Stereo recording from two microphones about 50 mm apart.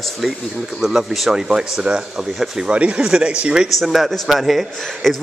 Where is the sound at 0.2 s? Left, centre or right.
Centre.